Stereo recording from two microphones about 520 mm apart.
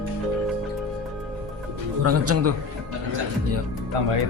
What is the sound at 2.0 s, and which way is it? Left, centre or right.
Speech, right.